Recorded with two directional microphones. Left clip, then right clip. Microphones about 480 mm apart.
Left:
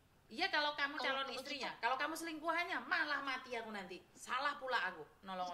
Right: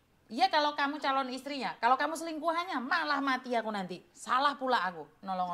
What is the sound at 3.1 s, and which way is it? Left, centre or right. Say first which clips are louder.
A woman's voice: right 10 dB; right.